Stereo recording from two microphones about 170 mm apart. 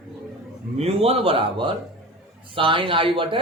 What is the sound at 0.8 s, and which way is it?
A man's voice, 35° right (ahead or behind).